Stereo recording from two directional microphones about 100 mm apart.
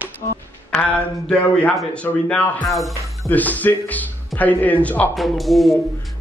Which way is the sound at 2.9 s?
30° right (ahead or behind).